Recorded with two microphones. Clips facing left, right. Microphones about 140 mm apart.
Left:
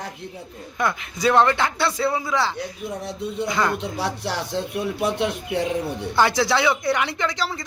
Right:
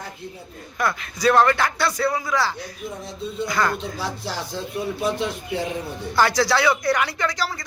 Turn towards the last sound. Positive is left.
turn(degrees=25)  # may be behind; listen again after turning